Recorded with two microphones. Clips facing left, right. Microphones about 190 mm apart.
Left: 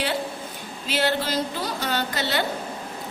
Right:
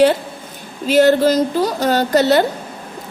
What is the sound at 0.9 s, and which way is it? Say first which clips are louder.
A woman's voice: right 13 dB; 45° right (ahead or behind).